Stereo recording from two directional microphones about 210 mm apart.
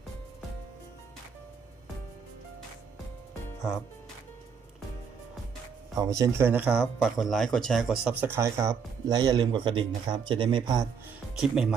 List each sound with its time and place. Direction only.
5.9 s speech: 15° right (ahead or behind)
11.3 s speech: centre (ahead or behind)